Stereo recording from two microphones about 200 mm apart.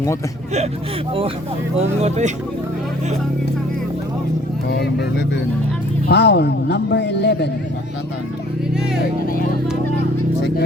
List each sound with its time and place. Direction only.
1.8 s speech: 35° right (ahead or behind)
4.7 s speech: 55° left (ahead or behind)